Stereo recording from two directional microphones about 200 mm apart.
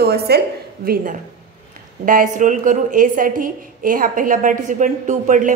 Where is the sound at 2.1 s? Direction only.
40° right (ahead or behind).